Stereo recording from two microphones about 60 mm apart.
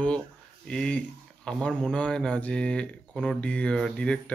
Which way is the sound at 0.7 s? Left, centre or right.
Centre.